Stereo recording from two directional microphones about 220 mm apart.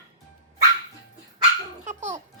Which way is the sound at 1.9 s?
30° right (ahead or behind).